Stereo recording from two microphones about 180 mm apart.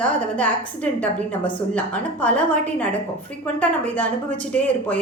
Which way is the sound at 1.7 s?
5° left (ahead or behind).